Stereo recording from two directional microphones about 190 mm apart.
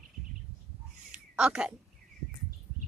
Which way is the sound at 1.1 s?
5° right (ahead or behind).